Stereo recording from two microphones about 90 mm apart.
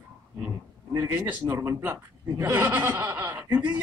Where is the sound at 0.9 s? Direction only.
30° right (ahead or behind).